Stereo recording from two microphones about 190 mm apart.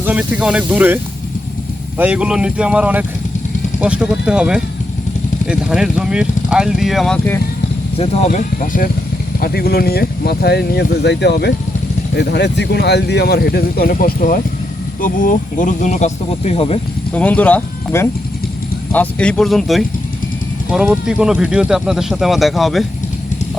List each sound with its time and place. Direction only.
0.0 s speech: 10° right (ahead or behind)
2.0 s speech: 5° right (ahead or behind)
7.9 s speech: 35° left (ahead or behind)
9.4 s speech: 55° left (ahead or behind); by 16.8 s 30° left (ahead or behind)
17.2 s speech: 10° left (ahead or behind)